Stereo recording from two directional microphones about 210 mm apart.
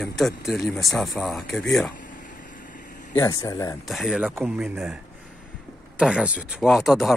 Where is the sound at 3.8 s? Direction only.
Centre (ahead or behind).